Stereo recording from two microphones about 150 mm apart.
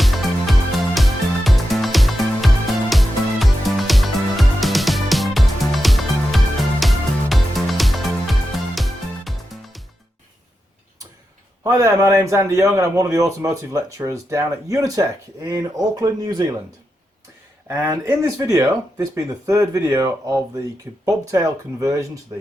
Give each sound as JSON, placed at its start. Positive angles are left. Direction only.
{"t": 0.0, "sound": "music", "side_deg": 0}
{"t": 11.6, "sound": "a man's voice", "side_deg": -20}
{"t": 17.7, "sound": "a man's voice", "side_deg": -20}